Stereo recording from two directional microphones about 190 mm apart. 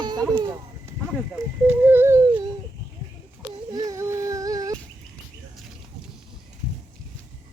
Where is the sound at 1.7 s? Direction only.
10° right (ahead or behind).